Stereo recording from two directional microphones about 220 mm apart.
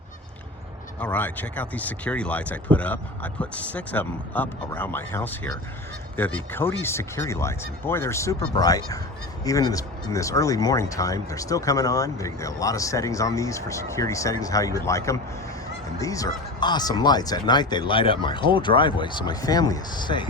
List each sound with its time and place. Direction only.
0.9 s speech: 5° left (ahead or behind)